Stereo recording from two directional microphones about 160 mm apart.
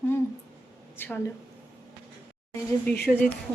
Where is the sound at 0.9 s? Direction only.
10° left (ahead or behind).